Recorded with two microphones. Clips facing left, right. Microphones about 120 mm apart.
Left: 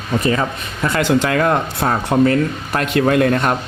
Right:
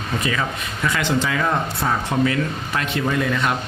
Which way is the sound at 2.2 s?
45° left (ahead or behind).